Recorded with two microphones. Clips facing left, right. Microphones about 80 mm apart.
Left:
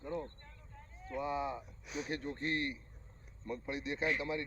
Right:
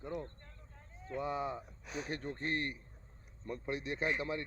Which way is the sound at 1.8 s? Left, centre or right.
Right.